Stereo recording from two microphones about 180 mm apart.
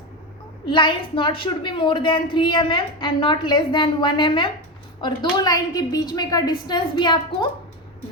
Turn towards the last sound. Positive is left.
turn(degrees=25)  # may be behind; listen again after turning